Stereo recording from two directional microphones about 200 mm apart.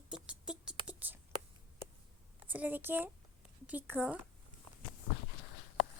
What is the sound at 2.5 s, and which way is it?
A woman's voice, 10° right (ahead or behind).